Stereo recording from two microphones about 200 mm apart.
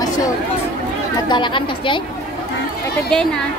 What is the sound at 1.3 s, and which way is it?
Speech, 25° left (ahead or behind).